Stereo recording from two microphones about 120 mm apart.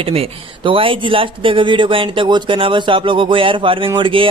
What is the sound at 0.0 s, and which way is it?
Speech, 55° right (ahead or behind).